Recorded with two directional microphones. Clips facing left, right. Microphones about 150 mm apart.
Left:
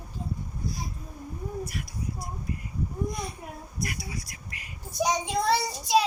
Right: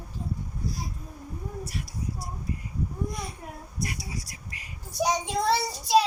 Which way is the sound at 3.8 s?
30° right (ahead or behind).